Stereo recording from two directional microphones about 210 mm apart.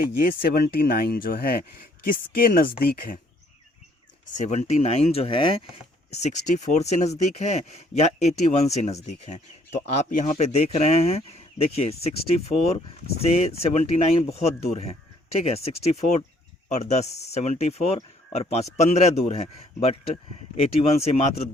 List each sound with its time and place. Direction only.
0.0 s speech: 45° left (ahead or behind)
4.4 s speech: 35° left (ahead or behind)
13.1 s speech: 30° left (ahead or behind)
20.6 s speech: 30° left (ahead or behind)